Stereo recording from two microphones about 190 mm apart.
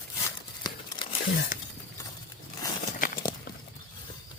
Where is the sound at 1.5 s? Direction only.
45° left (ahead or behind).